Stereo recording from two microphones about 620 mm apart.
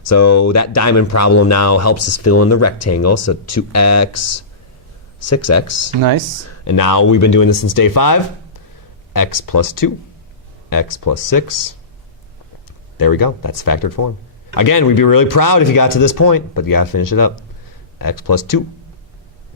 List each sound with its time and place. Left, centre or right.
0.0 s speech: left
6.0 s speech: right
6.4 s speech: left
13.0 s speech: left